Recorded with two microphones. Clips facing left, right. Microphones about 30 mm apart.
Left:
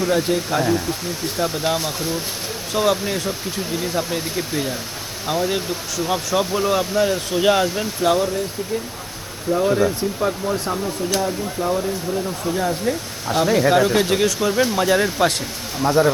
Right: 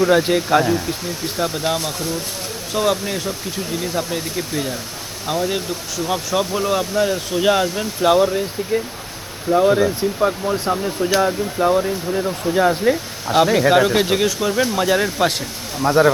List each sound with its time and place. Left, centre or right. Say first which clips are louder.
0.1 s speech: right 5 dB; centre
0.6 s speech: right 1 dB; centre
8.0 s speech: right 4 dB; centre
10.8 s speech: right 6 dB; right
13.3 s speech: right 2 dB; centre